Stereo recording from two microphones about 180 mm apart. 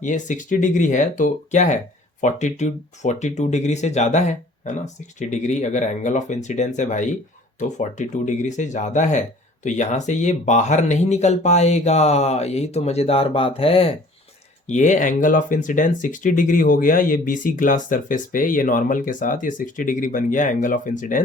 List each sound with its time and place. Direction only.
0.0 s speech: 45° left (ahead or behind)
14.7 s speech: 45° left (ahead or behind)